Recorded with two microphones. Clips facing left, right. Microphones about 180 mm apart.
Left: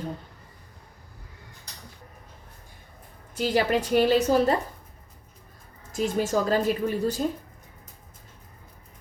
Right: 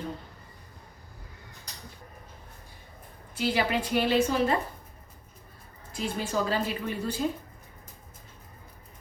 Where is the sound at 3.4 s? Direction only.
40° left (ahead or behind).